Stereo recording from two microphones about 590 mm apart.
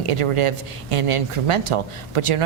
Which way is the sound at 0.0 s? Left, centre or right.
Right.